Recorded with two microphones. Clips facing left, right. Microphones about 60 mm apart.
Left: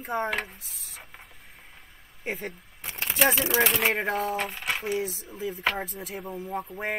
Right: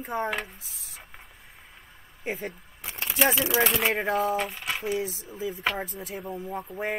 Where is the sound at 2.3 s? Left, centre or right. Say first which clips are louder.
Right 1 dB; centre.